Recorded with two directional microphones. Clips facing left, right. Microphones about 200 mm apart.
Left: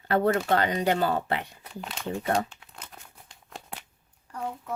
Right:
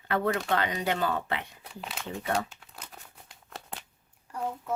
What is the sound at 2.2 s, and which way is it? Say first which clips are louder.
Speech: left 3 dB; 35° left (ahead or behind).